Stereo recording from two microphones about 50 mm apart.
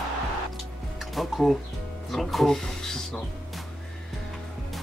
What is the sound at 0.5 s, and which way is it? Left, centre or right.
Music, centre.